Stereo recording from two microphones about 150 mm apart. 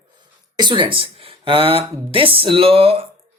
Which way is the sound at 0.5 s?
30° right (ahead or behind).